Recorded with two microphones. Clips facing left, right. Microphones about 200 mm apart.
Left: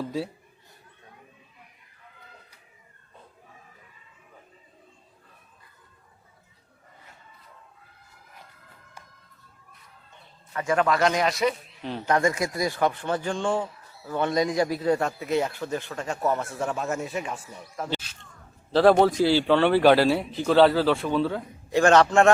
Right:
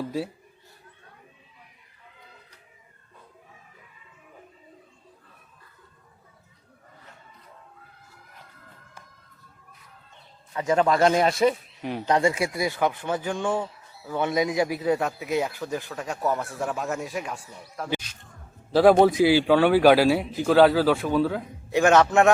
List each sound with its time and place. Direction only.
10.5 s speech: 20° right (ahead or behind)
11.8 s speech: 15° right (ahead or behind); by 17.8 s centre (ahead or behind)
18.7 s a man's voice: 10° right (ahead or behind)